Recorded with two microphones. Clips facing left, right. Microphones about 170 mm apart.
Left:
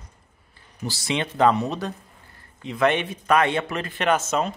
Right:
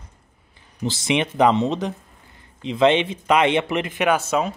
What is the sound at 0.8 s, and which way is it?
Speech, 20° right (ahead or behind).